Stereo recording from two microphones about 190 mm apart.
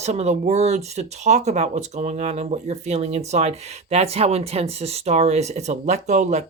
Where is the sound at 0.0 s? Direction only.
35° right (ahead or behind).